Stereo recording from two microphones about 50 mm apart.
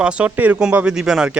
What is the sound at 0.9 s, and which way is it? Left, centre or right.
Speech, centre.